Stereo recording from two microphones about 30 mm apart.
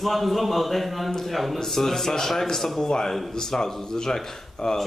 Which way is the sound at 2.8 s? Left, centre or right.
Left.